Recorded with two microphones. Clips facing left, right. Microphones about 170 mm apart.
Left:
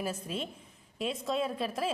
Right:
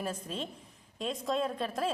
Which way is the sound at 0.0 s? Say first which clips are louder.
Left 1 dB; 5° left (ahead or behind).